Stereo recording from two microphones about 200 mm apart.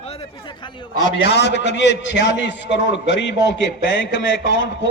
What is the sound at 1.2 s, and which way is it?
A man's voice, 60° left (ahead or behind).